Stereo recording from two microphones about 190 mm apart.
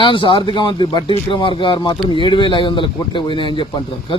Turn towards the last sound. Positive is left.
turn(degrees=25)  # may be behind; listen again after turning